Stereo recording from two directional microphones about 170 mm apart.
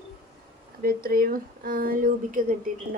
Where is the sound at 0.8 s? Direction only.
60° right (ahead or behind).